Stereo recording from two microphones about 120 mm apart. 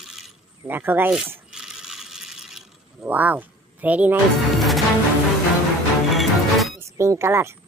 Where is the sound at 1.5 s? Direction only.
5° right (ahead or behind).